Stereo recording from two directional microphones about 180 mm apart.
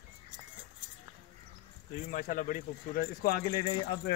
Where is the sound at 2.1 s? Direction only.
45° left (ahead or behind).